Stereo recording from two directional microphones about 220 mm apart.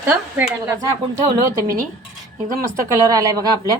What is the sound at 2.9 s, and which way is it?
Speech, 15° right (ahead or behind).